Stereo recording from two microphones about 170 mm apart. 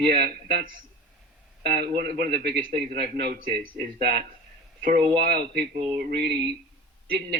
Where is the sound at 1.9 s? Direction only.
65° right (ahead or behind).